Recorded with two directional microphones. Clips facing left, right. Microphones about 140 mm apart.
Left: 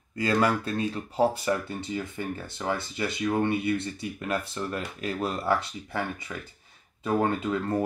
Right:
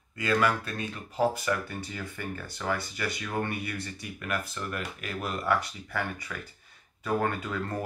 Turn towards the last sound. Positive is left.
turn(degrees=25)  # may be behind; listen again after turning